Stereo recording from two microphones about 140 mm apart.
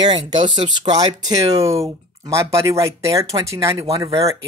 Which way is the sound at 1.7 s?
45° right (ahead or behind).